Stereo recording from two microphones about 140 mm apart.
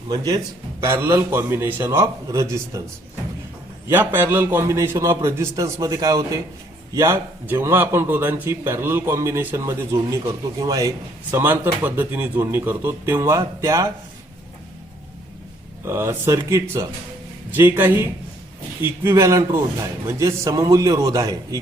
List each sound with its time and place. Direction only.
0.8 s a man's voice: 15° right (ahead or behind)
3.8 s a man's voice: 15° right (ahead or behind)
15.8 s a man's voice: 20° right (ahead or behind)